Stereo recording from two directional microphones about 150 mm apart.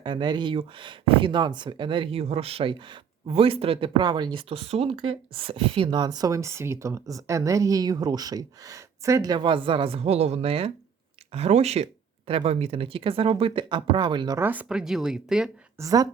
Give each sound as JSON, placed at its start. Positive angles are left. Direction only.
{"t": 0.0, "sound": "speech", "side_deg": -30}
{"t": 14.3, "sound": "speech", "side_deg": -10}
{"t": 15.8, "sound": "a woman's voice", "side_deg": -25}